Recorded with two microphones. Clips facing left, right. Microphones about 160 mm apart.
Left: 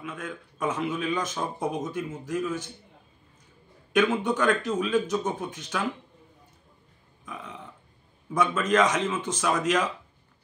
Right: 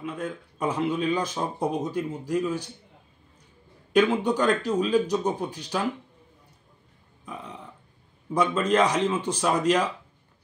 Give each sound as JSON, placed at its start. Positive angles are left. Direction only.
{"t": 0.0, "sound": "speech", "side_deg": -35}
{"t": 3.9, "sound": "speech", "side_deg": -35}
{"t": 7.2, "sound": "burping", "side_deg": -30}
{"t": 8.3, "sound": "speech", "side_deg": -30}